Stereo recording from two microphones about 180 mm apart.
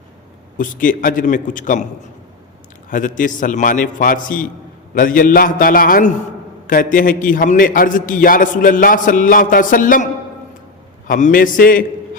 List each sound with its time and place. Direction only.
0.5 s a man's voice: 50° left (ahead or behind)
2.9 s a man's voice: 45° left (ahead or behind)
11.1 s a man's voice: 50° left (ahead or behind)